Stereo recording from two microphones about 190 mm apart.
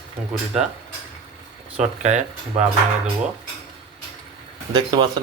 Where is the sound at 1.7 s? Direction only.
35° right (ahead or behind).